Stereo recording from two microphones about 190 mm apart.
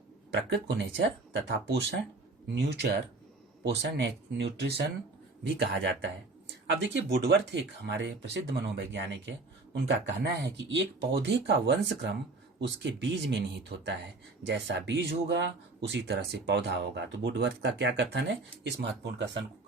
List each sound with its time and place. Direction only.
0.3 s speech: 65° right (ahead or behind)